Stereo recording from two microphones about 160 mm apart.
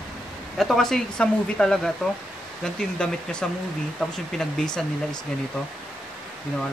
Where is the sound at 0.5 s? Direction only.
Centre (ahead or behind).